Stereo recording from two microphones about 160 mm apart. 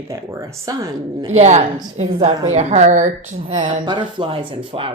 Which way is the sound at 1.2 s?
45° right (ahead or behind).